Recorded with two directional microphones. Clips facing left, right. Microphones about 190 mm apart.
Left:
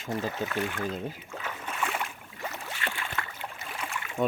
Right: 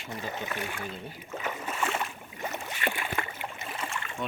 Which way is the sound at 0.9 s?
40° left (ahead or behind).